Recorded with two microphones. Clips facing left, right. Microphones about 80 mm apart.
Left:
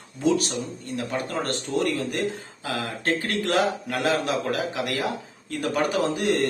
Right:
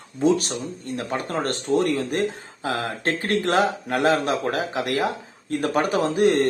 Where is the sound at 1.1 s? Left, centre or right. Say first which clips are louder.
Right 3 dB; right.